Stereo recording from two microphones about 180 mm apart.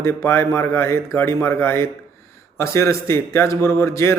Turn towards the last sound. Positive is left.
turn(degrees=15)  # may be behind; listen again after turning